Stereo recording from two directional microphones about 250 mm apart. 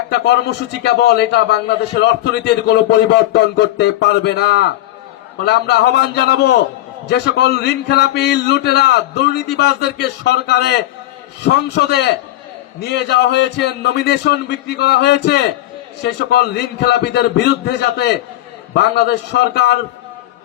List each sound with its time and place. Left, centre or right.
0.1 s a man's voice: left